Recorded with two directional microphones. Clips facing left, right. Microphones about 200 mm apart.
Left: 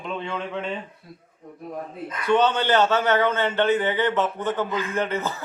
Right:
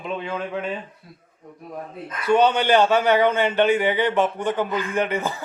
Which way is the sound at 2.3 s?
10° right (ahead or behind).